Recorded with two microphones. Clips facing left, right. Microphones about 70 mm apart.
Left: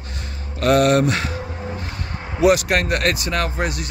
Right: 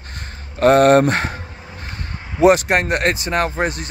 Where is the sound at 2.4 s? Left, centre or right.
Right.